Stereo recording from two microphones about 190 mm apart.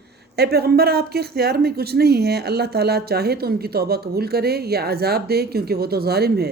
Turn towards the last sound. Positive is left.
turn(degrees=-55)  # may be behind; listen again after turning